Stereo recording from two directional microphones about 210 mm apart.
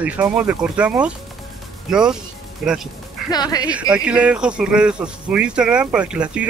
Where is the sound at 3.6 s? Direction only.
5° right (ahead or behind).